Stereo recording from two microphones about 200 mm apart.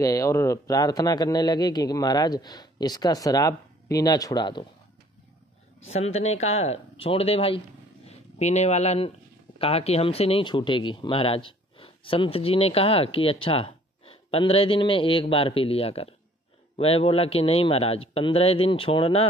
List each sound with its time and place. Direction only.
0.0 s speech: 15° left (ahead or behind)
5.9 s speech: 30° left (ahead or behind)